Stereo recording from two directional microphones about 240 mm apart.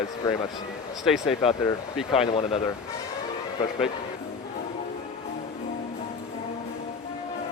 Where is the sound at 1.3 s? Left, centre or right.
Left.